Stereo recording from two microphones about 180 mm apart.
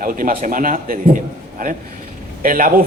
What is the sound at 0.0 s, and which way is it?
A man's voice, 50° right (ahead or behind).